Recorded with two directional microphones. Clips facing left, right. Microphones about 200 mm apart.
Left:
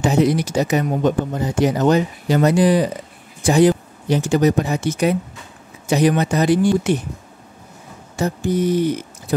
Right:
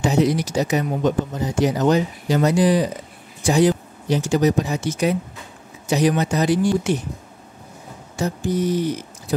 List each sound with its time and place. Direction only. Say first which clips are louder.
0.0 s speech: left 2 dB; 55° left (ahead or behind)
8.2 s speech: left 3 dB; 55° left (ahead or behind)